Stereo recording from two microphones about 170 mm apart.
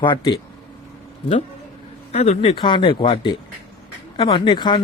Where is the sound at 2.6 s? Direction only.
30° left (ahead or behind).